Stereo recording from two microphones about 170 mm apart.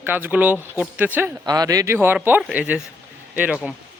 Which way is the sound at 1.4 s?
25° right (ahead or behind).